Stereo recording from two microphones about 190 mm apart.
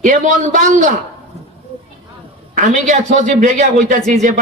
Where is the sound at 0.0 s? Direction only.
40° right (ahead or behind).